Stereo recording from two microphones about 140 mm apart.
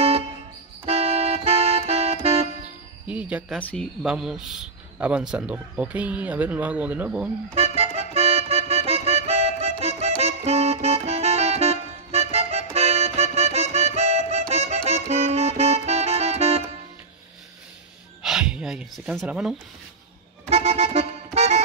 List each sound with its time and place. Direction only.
0.8 s music: 50° right (ahead or behind)
3.1 s music: 10° right (ahead or behind)
4.0 s a man's voice: 5° right (ahead or behind)
7.5 s music: 50° right (ahead or behind)
18.2 s a sound: 5° right (ahead or behind)
19.2 s a man's voice: 10° right (ahead or behind)
20.4 s accordion: 50° right (ahead or behind)